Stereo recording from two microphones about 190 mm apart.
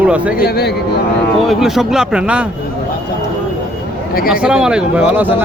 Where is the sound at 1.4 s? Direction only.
Centre (ahead or behind).